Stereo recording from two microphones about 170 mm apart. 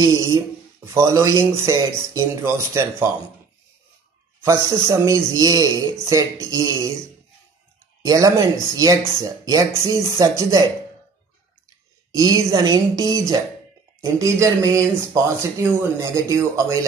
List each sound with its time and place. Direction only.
0.0 s speech: 20° right (ahead or behind)
4.5 s speech: 20° right (ahead or behind)
8.0 s speech: 20° right (ahead or behind)
12.1 s speech: 20° right (ahead or behind)